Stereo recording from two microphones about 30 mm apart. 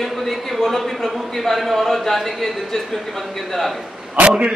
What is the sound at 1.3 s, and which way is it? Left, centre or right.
A man's voice, centre.